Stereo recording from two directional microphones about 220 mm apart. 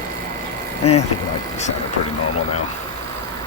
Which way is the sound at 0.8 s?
30° left (ahead or behind).